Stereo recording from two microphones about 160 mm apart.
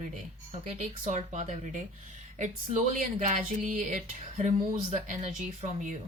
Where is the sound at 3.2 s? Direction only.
50° right (ahead or behind).